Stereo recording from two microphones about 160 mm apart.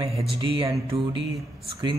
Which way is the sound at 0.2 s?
35° right (ahead or behind).